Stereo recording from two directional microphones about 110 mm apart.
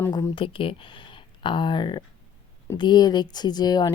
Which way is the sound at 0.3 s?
55° left (ahead or behind).